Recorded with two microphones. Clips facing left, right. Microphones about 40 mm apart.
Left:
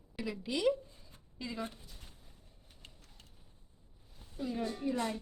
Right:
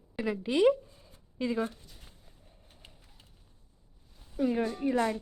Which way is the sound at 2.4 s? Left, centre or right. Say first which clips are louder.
Right 4 dB; right.